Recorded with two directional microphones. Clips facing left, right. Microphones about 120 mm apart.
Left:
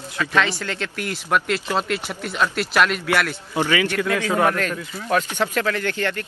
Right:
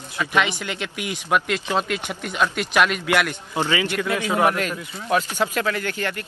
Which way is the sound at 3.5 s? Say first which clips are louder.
Left 2 dB; 15° right (ahead or behind).